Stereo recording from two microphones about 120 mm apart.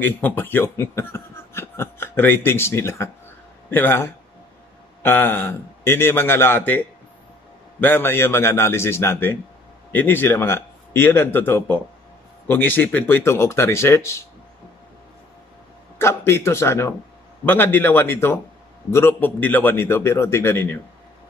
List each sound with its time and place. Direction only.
0.0 s a man's voice: 15° left (ahead or behind)
7.8 s a man's voice: 20° left (ahead or behind)
16.0 s a man's voice: 20° left (ahead or behind)